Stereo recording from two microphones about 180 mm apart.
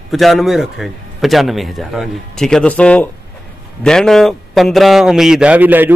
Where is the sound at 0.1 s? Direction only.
Centre (ahead or behind).